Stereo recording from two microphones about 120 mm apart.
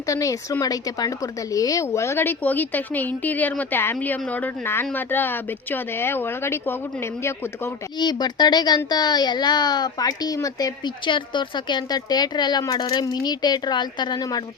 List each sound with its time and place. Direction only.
0.0 s a woman's voice: 30° left (ahead or behind)
7.9 s a woman's voice: 35° left (ahead or behind)